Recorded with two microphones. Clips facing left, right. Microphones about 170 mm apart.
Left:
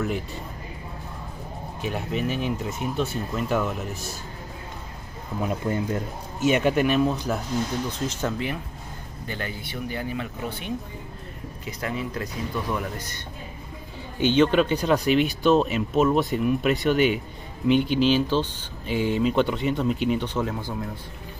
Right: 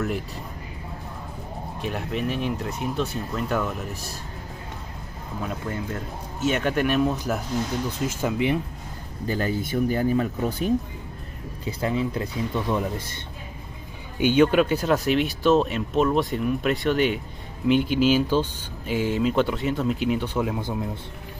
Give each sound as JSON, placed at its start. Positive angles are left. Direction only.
{"t": 1.8, "sound": "speech", "side_deg": 0}
{"t": 5.5, "sound": "speech", "side_deg": 20}
{"t": 9.3, "sound": "speech", "side_deg": -40}
{"t": 11.6, "sound": "speech", "side_deg": -25}
{"t": 14.2, "sound": "speech", "side_deg": -10}